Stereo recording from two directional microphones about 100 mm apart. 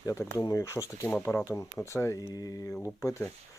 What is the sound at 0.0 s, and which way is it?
Speech, 25° left (ahead or behind).